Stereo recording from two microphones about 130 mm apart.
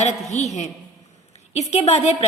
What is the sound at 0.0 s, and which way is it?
A woman's voice, 60° left (ahead or behind).